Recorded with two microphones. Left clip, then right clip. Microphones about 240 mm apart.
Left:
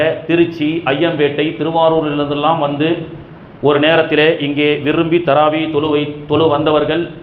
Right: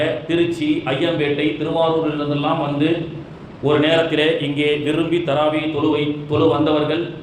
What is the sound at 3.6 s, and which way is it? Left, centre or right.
A man's voice, left.